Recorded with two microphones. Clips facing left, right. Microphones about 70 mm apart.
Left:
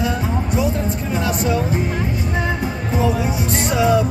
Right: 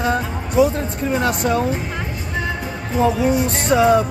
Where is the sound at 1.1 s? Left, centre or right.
Right.